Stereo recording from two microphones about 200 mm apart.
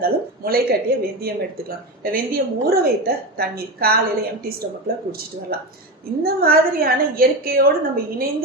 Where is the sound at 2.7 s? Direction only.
50° right (ahead or behind).